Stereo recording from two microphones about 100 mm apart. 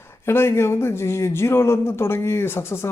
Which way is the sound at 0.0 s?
25° left (ahead or behind).